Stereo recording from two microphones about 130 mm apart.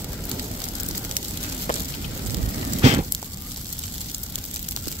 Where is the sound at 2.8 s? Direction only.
55° right (ahead or behind).